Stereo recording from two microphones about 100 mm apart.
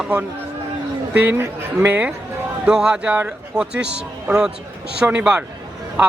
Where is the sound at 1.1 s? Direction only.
20° right (ahead or behind).